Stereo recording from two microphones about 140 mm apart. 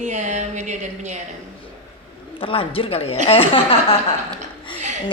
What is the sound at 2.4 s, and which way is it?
A woman's voice, 40° left (ahead or behind).